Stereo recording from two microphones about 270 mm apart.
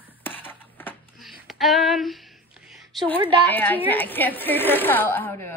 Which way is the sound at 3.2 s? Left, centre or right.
Centre.